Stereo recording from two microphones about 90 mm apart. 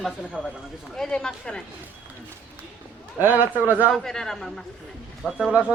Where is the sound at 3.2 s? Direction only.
20° right (ahead or behind).